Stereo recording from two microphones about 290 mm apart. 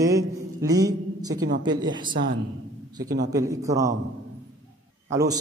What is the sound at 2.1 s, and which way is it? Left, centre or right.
Speech, right.